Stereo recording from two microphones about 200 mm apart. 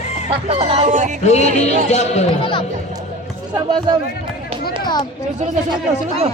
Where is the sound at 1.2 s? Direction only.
35° left (ahead or behind).